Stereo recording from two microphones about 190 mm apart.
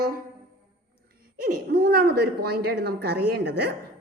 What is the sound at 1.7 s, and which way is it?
A woman's voice, 55° right (ahead or behind).